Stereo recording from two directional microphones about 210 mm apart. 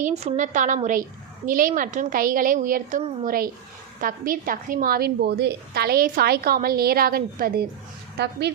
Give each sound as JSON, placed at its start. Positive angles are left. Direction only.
{"t": 0.0, "sound": "a woman's voice", "side_deg": -30}